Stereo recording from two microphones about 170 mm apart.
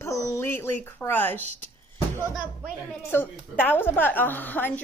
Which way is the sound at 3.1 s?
10° left (ahead or behind).